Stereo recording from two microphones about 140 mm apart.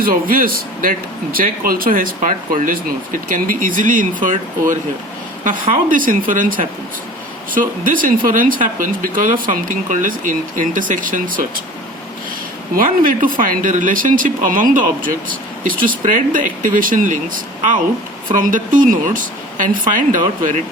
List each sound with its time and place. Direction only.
0.0 s speech: 90° right; by 11.4 s 75° right (ahead or behind)
12.7 s speech: 85° right
15.6 s speech: 85° right; by 17.2 s 70° right (ahead or behind)
18.3 s speech: 70° right (ahead or behind)